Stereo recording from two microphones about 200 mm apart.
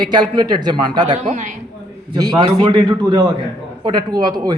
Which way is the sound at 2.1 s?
20° right (ahead or behind).